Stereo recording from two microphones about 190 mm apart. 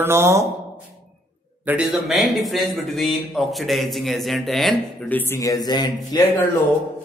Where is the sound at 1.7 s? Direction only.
5° right (ahead or behind); by 6.2 s 20° left (ahead or behind).